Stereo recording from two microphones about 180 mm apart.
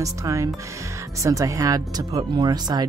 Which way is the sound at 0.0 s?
15° right (ahead or behind).